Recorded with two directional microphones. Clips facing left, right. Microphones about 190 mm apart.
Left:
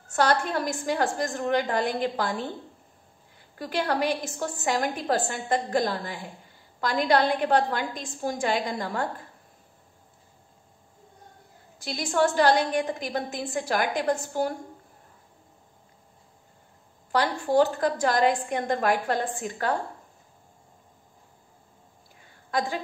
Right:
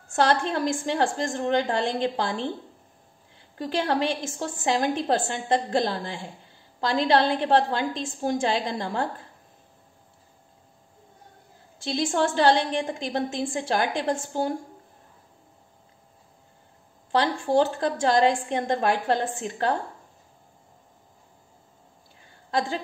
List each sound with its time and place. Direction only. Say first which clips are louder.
0.1 s a woman's voice: right 1 dB; 25° right (ahead or behind)
11.8 s a woman's voice: even; 25° right (ahead or behind)
17.1 s a woman's voice: right 1 dB; 25° right (ahead or behind)
22.5 s a woman's voice: right 1 dB; 25° right (ahead or behind)